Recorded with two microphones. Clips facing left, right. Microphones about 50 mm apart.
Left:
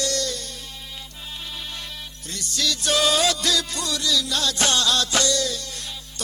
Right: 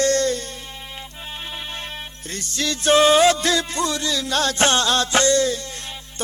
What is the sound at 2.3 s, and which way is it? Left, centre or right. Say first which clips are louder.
Music: right 1 dB; right.